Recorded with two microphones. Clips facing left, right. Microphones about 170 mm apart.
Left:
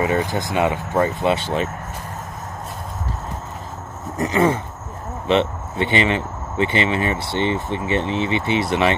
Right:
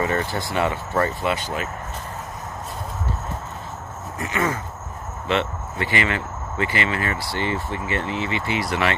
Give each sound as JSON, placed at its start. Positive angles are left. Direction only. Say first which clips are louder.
{"t": 0.0, "sound": "speech", "louder": "left 3 dB", "side_deg": 15}
{"t": 4.2, "sound": "a sound", "louder": "left 7 dB", "side_deg": 30}
{"t": 5.2, "sound": "speech", "louder": "left 5 dB", "side_deg": 20}